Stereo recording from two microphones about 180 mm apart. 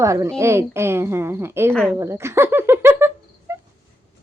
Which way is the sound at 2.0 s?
15° right (ahead or behind).